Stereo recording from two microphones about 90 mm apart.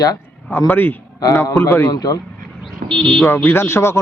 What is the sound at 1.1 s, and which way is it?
Speech, 40° left (ahead or behind).